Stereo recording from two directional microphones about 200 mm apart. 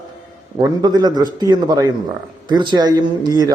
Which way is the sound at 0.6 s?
20° right (ahead or behind).